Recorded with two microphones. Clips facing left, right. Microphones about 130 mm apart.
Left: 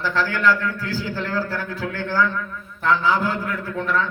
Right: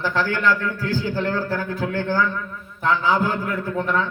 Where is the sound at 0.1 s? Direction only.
15° right (ahead or behind).